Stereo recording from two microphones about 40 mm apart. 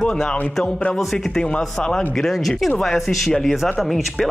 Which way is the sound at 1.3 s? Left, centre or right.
Left.